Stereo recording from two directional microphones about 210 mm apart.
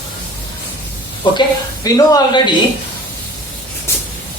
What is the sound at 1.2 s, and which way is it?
Speech, 20° left (ahead or behind).